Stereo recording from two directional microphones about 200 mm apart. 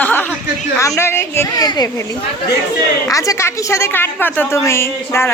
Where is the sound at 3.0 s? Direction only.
15° left (ahead or behind).